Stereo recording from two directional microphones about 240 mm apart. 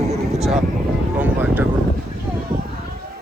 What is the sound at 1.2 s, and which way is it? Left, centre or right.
Vehicle, centre.